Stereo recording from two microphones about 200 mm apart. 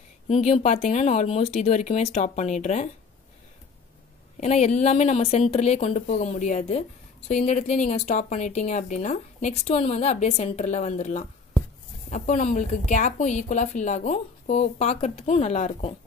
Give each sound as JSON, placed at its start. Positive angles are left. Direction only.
{"t": 0.3, "sound": "a woman's voice", "side_deg": 35}
{"t": 4.4, "sound": "a woman's voice", "side_deg": 35}